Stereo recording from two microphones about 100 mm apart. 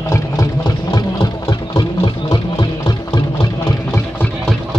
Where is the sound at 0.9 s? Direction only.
45° left (ahead or behind).